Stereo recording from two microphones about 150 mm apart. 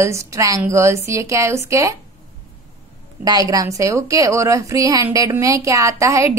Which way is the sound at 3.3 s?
25° right (ahead or behind).